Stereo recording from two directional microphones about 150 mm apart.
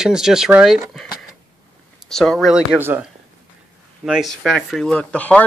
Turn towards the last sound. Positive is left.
turn(degrees=10)  # may be behind; listen again after turning